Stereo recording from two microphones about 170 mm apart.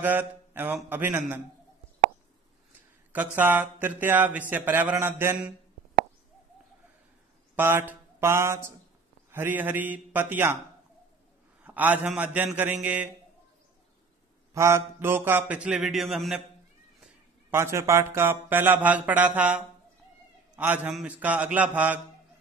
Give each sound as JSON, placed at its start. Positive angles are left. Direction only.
{"t": 0.0, "sound": "mantra", "side_deg": -10}
{"t": 0.8, "sound": "speech", "side_deg": -10}
{"t": 3.1, "sound": "speech", "side_deg": -10}
{"t": 7.5, "sound": "a sound", "side_deg": -10}
{"t": 9.3, "sound": "speech", "side_deg": -10}
{"t": 11.6, "sound": "speech", "side_deg": -10}
{"t": 14.5, "sound": "speech", "side_deg": -15}
{"t": 17.0, "sound": "speech", "side_deg": -15}